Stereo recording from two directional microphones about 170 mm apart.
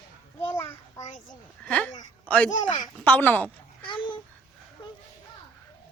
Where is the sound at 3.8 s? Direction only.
30° left (ahead or behind).